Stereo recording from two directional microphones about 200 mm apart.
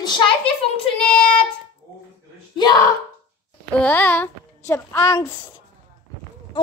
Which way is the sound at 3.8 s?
10° left (ahead or behind).